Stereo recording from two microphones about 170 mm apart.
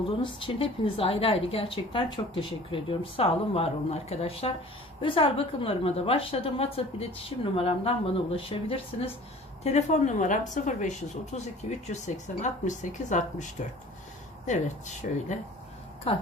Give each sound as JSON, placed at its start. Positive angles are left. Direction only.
{"t": 0.2, "sound": "a woman's voice", "side_deg": 30}
{"t": 15.0, "sound": "speech", "side_deg": 55}
{"t": 16.1, "sound": "a woman's voice", "side_deg": 35}